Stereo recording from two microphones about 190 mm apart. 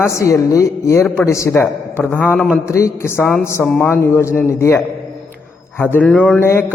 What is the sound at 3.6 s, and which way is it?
Speech, 5° left (ahead or behind).